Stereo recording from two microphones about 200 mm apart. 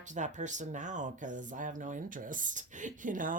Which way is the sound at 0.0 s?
40° right (ahead or behind).